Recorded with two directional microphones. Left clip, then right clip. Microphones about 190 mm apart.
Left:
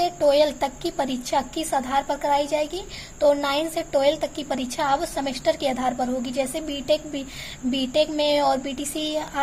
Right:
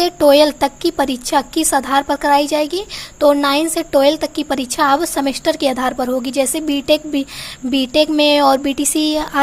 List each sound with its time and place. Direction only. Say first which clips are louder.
0.0 s a woman's voice: right 8 dB; 30° right (ahead or behind)